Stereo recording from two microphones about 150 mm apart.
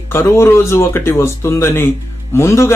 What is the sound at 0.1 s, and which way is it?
Speech, 15° left (ahead or behind).